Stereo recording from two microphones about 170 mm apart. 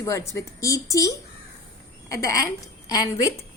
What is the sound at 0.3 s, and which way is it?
A woman's voice, 20° left (ahead or behind).